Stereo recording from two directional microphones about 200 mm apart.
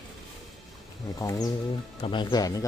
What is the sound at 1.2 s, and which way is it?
Speech, 20° left (ahead or behind).